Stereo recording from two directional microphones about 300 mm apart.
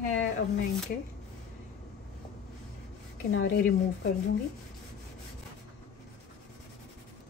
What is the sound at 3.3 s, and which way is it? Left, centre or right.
Speech, left.